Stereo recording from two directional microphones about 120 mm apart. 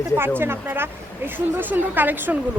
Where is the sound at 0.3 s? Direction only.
20° right (ahead or behind).